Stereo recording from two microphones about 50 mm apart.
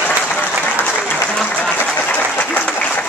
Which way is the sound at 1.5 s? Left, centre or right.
Left.